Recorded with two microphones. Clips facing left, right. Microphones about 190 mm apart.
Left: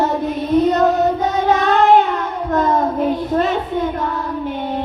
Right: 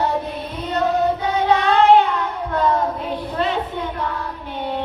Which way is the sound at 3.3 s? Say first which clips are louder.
Left 5 dB; 45° left (ahead or behind).